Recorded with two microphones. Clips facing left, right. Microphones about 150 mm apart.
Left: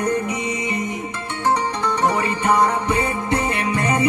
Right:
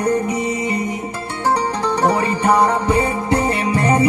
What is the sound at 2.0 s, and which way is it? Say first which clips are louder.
Music: right 3 dB; 35° right (ahead or behind).